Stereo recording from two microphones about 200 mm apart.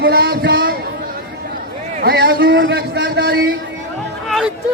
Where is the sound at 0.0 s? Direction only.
50° right (ahead or behind).